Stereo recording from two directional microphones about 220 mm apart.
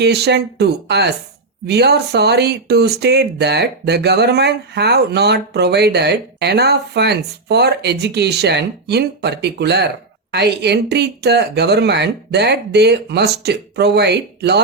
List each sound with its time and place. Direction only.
0.0 s speech: 50° right (ahead or behind)